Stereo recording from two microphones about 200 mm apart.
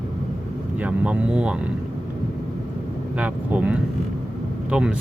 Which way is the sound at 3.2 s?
5° right (ahead or behind).